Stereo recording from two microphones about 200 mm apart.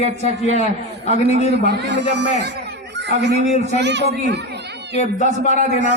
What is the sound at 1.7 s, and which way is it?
Speech, 60° right (ahead or behind).